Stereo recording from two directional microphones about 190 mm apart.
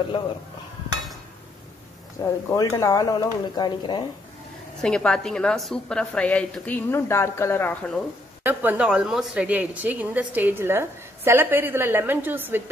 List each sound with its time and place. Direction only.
2.2 s speech: 20° left (ahead or behind)
4.8 s a woman's voice: 5° left (ahead or behind)
8.5 s a woman's voice: 5° right (ahead or behind)